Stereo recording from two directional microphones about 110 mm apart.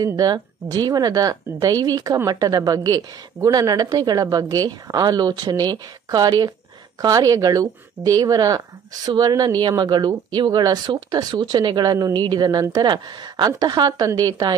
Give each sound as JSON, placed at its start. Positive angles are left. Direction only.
{"t": 0.0, "sound": "speech", "side_deg": -35}